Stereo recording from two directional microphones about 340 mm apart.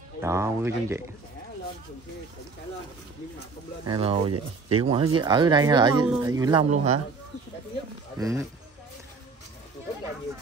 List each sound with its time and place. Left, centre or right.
0.2 s speech: centre
3.8 s speech: centre
8.2 s speech: centre